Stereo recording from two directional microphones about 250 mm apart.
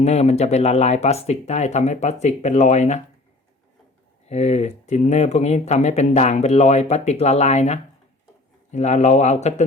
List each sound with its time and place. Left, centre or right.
0.0 s speech: left
4.3 s speech: left